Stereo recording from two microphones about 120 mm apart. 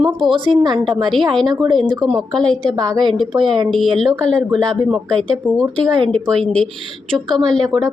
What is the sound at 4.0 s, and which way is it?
Speech, centre (ahead or behind).